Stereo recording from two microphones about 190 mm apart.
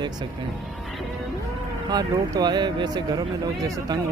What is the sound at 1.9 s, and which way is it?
Speech, 20° right (ahead or behind).